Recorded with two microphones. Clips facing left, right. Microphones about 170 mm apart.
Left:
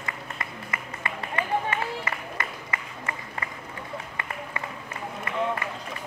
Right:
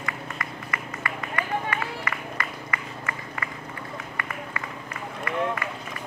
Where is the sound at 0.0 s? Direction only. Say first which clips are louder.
Right 2 dB; 25° left (ahead or behind).